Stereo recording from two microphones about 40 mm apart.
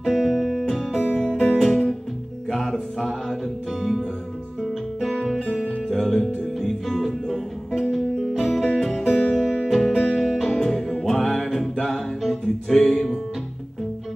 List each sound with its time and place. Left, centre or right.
0.2 s music: centre
2.5 s mantra: centre
5.9 s music: centre
9.1 s music: left
9.7 s music: centre
9.9 s music: centre
10.3 s music: centre
11.4 s music: centre